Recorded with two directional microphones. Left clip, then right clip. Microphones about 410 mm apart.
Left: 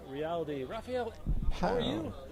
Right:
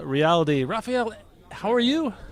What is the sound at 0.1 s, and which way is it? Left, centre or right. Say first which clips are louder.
Speech: right 15 dB; right.